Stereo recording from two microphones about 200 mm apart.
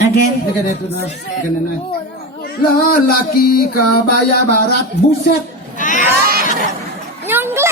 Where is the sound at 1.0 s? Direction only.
40° left (ahead or behind).